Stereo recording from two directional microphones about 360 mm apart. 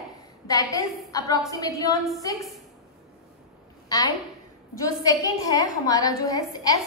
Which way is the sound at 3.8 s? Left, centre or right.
Centre.